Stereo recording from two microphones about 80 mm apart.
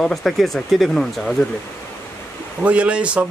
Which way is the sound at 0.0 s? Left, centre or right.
Centre.